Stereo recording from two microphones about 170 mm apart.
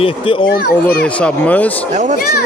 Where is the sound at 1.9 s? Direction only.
45° right (ahead or behind).